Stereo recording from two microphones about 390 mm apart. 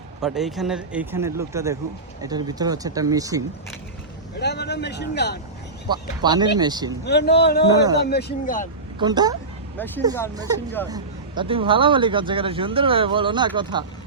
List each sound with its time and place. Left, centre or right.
0.2 s speech: centre
4.4 s speech: left
5.9 s speech: centre
7.0 s speech: left
9.0 s speech: centre
9.7 s speech: centre
10.8 s speech: centre